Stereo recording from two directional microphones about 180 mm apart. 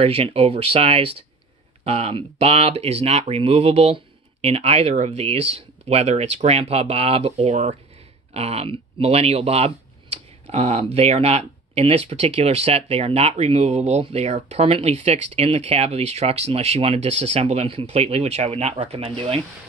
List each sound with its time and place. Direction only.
0.0 s speech: 30° right (ahead or behind)